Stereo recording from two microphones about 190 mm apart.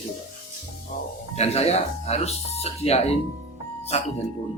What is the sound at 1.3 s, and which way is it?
Speech, 35° left (ahead or behind).